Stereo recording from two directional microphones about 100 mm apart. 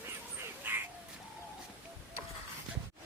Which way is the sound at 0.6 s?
20° right (ahead or behind).